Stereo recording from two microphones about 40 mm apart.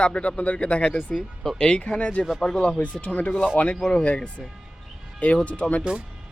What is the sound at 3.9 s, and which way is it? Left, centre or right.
Speech, left.